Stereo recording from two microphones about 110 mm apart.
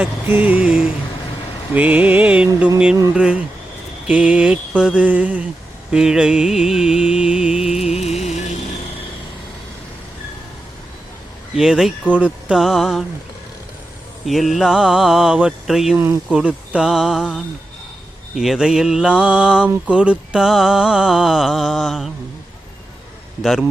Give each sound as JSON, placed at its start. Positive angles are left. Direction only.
{"t": 0.0, "sound": "music", "side_deg": -15}
{"t": 7.9, "sound": "music", "side_deg": 75}
{"t": 11.5, "sound": "mantra", "side_deg": -5}
{"t": 14.3, "sound": "mantra", "side_deg": 0}
{"t": 18.3, "sound": "music", "side_deg": -5}
{"t": 19.9, "sound": "mantra", "side_deg": -10}
{"t": 23.4, "sound": "mantra", "side_deg": 0}